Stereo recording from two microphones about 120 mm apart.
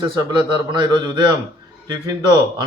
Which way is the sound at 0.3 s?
40° right (ahead or behind).